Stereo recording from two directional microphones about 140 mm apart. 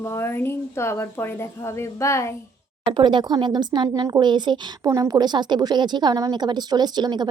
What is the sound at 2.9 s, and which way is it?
A woman's voice, 35° right (ahead or behind).